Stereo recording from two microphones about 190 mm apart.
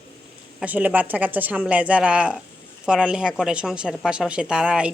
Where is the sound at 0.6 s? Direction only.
10° right (ahead or behind).